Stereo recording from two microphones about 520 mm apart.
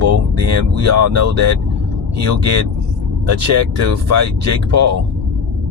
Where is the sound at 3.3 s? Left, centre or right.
Right.